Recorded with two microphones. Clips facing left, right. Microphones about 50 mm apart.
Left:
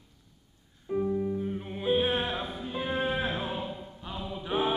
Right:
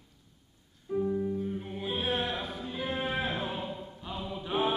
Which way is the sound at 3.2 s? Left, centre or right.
Centre.